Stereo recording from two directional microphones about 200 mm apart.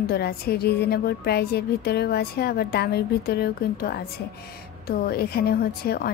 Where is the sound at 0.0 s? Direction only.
50° left (ahead or behind).